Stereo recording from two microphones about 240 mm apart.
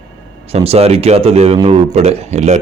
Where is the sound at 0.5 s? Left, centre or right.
Right.